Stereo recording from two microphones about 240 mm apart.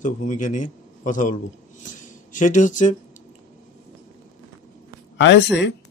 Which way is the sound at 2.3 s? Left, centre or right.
Left.